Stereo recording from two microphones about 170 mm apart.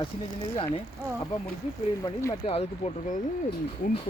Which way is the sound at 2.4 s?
35° left (ahead or behind).